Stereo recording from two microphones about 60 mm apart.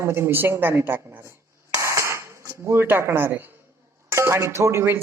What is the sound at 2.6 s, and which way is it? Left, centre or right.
Speech, right.